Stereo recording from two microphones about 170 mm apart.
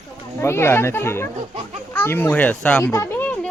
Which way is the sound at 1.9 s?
15° left (ahead or behind).